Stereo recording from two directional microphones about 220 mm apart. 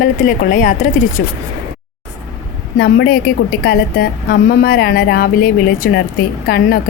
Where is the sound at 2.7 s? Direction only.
45° left (ahead or behind).